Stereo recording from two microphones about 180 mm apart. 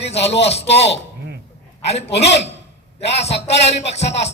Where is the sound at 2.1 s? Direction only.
70° left (ahead or behind).